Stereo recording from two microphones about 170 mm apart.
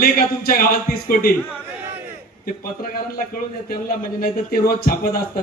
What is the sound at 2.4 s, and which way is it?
A man's voice, 60° left (ahead or behind).